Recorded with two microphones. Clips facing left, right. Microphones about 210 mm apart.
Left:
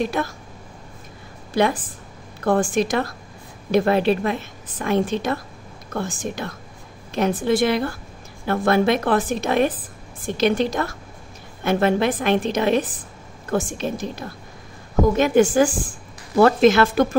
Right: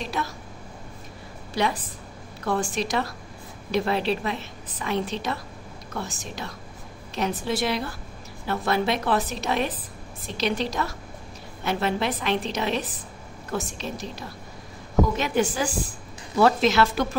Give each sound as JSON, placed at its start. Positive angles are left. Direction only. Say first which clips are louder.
{"t": 0.0, "sound": "a woman's voice", "louder": "left 7 dB", "side_deg": 50}
{"t": 1.5, "sound": "a woman's voice", "louder": "left 6 dB", "side_deg": 50}
{"t": 15.1, "sound": "a woman's voice", "louder": "left 9 dB", "side_deg": 50}